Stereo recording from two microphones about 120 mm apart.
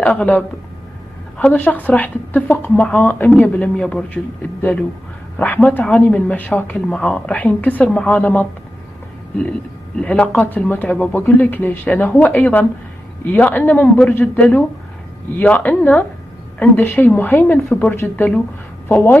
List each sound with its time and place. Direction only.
0.0 s a man's voice: 10° left (ahead or behind)
9.5 s a man's voice: 5° left (ahead or behind)